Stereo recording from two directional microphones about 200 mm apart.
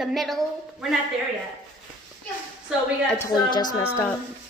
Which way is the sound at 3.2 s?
20° left (ahead or behind).